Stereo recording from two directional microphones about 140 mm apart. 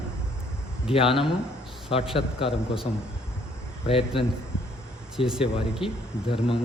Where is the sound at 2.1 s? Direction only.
40° left (ahead or behind).